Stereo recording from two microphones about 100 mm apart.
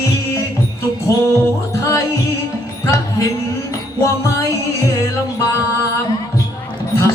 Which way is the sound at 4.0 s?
30° left (ahead or behind).